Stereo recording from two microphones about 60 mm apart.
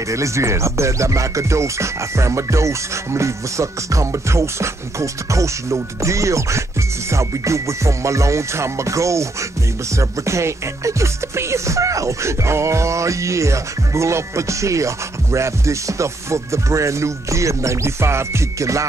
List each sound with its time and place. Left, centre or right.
0.1 s music: right